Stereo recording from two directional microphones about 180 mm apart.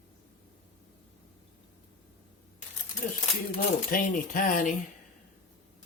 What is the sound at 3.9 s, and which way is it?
Speech, 50° left (ahead or behind).